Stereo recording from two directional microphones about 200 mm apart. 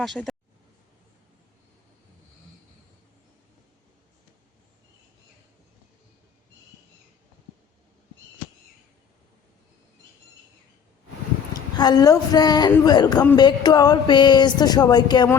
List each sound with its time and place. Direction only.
0.0 s speech: centre (ahead or behind)
11.5 s speech: 20° left (ahead or behind)